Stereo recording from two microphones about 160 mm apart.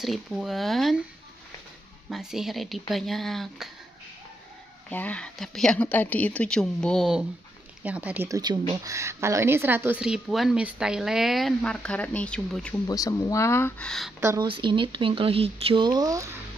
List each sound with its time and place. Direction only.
0.0 s a woman's voice: centre (ahead or behind)
2.0 s a woman's voice: centre (ahead or behind)
4.8 s a woman's voice: 10° left (ahead or behind); by 8.3 s 10° right (ahead or behind)
8.3 s a woman's voice: 25° right (ahead or behind); by 12.7 s 5° left (ahead or behind)
12.8 s speech: 20° left (ahead or behind)
13.8 s a woman's voice: centre (ahead or behind)
14.2 s speech: 20° right (ahead or behind)
14.5 s speech: 30° right (ahead or behind)